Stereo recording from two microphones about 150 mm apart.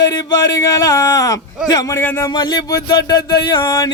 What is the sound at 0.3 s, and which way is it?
Music, 20° left (ahead or behind).